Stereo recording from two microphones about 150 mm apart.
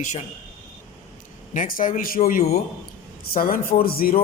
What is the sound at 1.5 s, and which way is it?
A man's voice, 65° left (ahead or behind).